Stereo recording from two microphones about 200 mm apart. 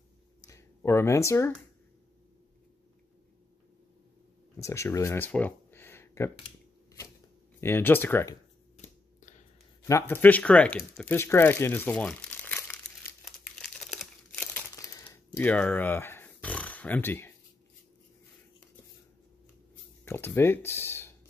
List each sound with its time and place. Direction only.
0.5 s speech: 15° left (ahead or behind)
4.6 s speech: 15° left (ahead or behind)
7.6 s speech: 10° left (ahead or behind)
8.7 s a sound: 35° left (ahead or behind)
9.8 s speech: 15° left (ahead or behind)
13.2 s crumpling: centre (ahead or behind)
20.1 s speech: 10° left (ahead or behind)